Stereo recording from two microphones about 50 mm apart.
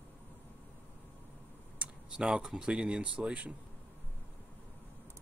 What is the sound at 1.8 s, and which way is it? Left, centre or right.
Speech, centre.